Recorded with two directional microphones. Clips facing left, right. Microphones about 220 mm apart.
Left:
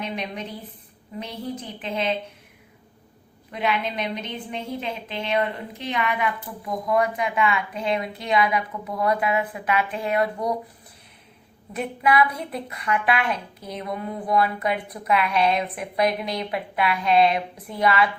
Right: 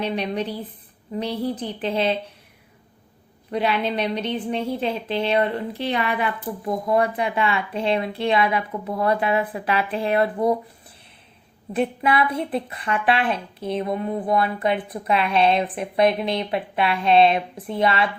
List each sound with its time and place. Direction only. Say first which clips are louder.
0.0 s a woman's voice: right 6 dB; 35° right (ahead or behind)
3.5 s a woman's voice: right 4 dB; 35° right (ahead or behind)
11.7 s a woman's voice: right 2 dB; 30° right (ahead or behind)